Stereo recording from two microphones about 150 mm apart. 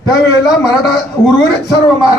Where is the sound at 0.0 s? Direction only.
25° left (ahead or behind).